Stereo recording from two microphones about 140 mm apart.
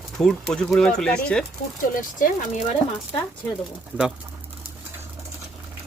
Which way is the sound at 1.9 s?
65° left (ahead or behind).